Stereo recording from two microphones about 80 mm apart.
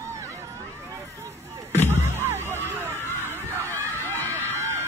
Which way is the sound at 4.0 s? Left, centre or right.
Left.